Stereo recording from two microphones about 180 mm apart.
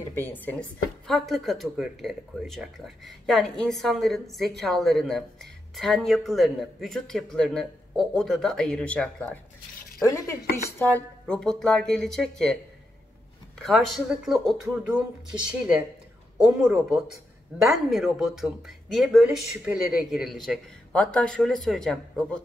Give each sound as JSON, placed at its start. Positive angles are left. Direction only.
{"t": 0.1, "sound": "speech", "side_deg": 10}
{"t": 10.0, "sound": "dishes", "side_deg": 15}
{"t": 11.0, "sound": "speech", "side_deg": 5}
{"t": 13.6, "sound": "speech", "side_deg": 0}